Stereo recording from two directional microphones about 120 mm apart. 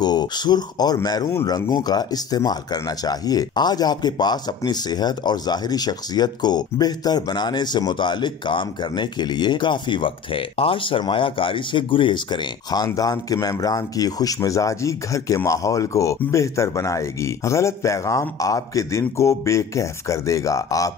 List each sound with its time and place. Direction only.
0.0 s a man's voice: 35° left (ahead or behind)